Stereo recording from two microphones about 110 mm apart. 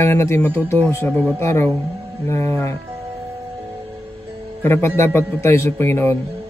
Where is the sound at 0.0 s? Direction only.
25° left (ahead or behind).